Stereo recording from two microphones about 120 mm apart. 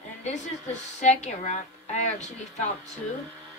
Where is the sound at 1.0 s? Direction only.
70° left (ahead or behind).